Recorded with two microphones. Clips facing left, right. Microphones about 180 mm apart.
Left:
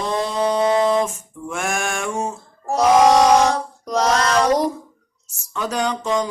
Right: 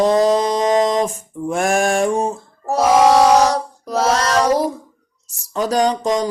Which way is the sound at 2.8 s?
5° right (ahead or behind).